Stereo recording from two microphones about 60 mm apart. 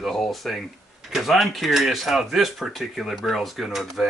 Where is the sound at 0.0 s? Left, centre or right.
Centre.